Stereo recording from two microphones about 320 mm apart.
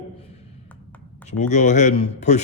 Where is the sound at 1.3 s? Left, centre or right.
Left.